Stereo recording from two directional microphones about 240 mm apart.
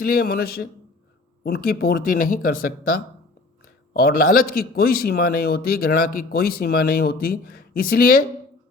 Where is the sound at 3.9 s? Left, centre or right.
Left.